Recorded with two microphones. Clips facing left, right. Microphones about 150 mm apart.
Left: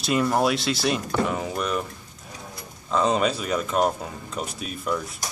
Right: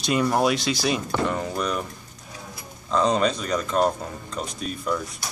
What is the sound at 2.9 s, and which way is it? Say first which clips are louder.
Speech: right 1 dB; 5° left (ahead or behind).